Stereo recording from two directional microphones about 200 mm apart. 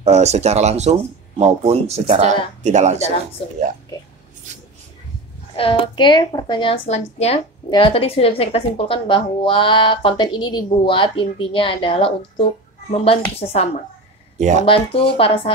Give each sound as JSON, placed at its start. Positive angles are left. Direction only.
{"t": 0.0, "sound": "speech", "side_deg": -35}
{"t": 3.4, "sound": "a woman's voice", "side_deg": 30}
{"t": 5.6, "sound": "a woman's voice", "side_deg": 25}